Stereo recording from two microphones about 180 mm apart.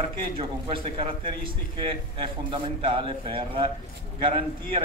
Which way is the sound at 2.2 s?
30° right (ahead or behind).